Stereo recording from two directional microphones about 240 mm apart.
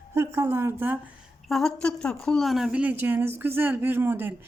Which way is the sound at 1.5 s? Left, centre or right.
Centre.